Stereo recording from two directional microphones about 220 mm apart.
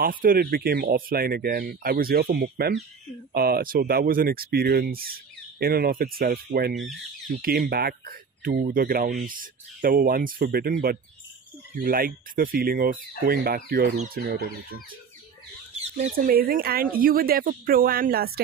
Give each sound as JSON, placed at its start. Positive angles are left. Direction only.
{"t": 0.0, "sound": "speech", "side_deg": -40}
{"t": 6.7, "sound": "speech", "side_deg": 0}
{"t": 7.2, "sound": "speech", "side_deg": -40}
{"t": 15.7, "sound": "speech", "side_deg": -35}